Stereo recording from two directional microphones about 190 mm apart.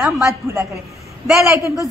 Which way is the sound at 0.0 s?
5° right (ahead or behind).